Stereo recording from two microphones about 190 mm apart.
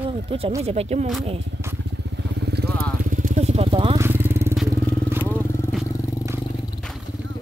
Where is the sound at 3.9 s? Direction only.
10° right (ahead or behind).